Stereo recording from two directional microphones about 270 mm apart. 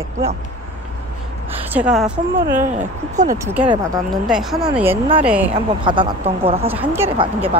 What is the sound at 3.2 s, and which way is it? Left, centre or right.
Speech, right.